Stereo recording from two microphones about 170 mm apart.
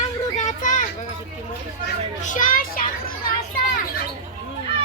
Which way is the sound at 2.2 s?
50° left (ahead or behind).